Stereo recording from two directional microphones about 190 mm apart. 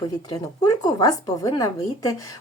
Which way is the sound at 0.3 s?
20° left (ahead or behind).